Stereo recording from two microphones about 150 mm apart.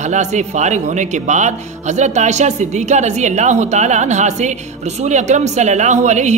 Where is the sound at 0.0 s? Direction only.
50° right (ahead or behind).